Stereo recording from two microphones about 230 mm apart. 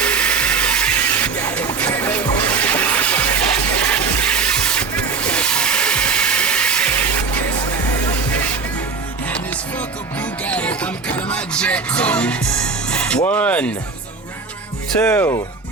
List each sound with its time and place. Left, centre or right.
0.0 s music: centre
3.8 s vehicle: centre
9.3 s music: centre
14.9 s speech: centre